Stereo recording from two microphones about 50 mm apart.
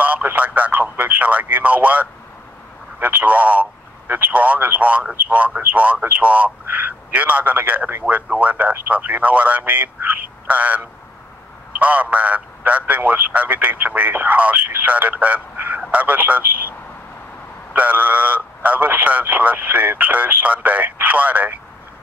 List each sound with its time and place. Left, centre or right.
0.0 s radio: right
0.9 s a man's voice: right
11.8 s a man's voice: right
17.7 s a man's voice: right